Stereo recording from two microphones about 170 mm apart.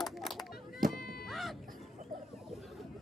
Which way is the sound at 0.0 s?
Centre (ahead or behind).